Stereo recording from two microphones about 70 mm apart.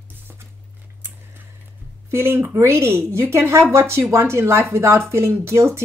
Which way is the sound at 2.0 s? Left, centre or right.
Right.